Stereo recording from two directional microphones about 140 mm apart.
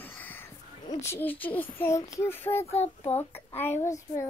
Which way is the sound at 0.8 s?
20° left (ahead or behind).